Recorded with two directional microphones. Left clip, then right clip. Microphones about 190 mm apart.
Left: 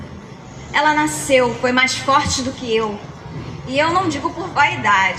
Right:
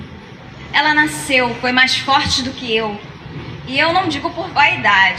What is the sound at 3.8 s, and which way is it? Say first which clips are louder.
A woman's voice: right 2 dB; 25° right (ahead or behind).